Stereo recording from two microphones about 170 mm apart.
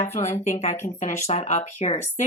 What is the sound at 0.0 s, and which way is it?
Speech, 45° left (ahead or behind).